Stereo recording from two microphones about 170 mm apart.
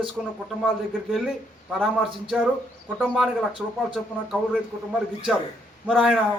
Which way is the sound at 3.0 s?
Centre (ahead or behind).